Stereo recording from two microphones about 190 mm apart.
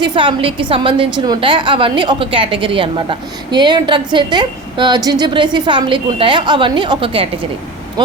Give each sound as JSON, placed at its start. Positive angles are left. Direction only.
{"t": 0.0, "sound": "a woman's voice", "side_deg": -25}